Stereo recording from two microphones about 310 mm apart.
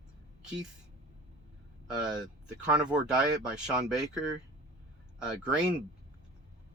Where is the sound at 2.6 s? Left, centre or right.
Centre.